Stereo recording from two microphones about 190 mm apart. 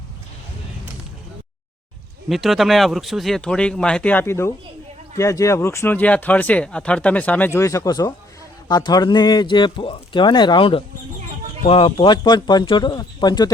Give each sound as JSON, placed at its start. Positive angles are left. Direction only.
{"t": 2.3, "sound": "speech", "side_deg": 0}